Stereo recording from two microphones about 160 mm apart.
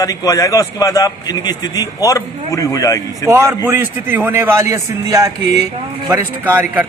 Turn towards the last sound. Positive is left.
turn(degrees=-10)  # may be behind; listen again after turning